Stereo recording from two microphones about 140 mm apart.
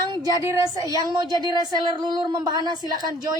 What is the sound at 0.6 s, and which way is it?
Speech, 25° right (ahead or behind).